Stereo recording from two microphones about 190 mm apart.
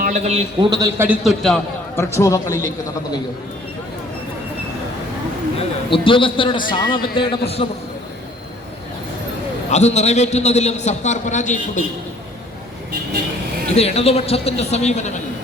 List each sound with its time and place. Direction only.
0.0 s a man's voice: 35° right (ahead or behind)
0.7 s a man's voice: 20° right (ahead or behind)
1.0 s a man's voice: 5° right (ahead or behind)
2.0 s a man's voice: 15° left (ahead or behind)
5.9 s a man's voice: 25° left (ahead or behind)
9.6 s a man's voice: 35° left (ahead or behind)
13.7 s a man's voice: 35° left (ahead or behind)